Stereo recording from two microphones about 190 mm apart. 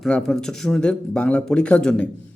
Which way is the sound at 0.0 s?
Centre (ahead or behind).